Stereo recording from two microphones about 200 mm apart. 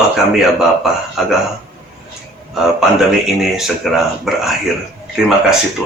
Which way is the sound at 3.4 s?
Centre (ahead or behind).